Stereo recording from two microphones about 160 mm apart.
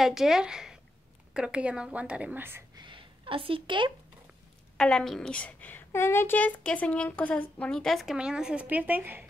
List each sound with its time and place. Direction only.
0.0 s a woman's voice: centre (ahead or behind)
2.7 s a sound: 30° right (ahead or behind)
4.7 s a woman's voice: 5° left (ahead or behind); by 9.2 s 10° right (ahead or behind)